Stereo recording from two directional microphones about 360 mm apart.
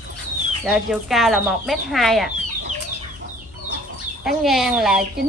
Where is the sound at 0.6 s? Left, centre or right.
Centre.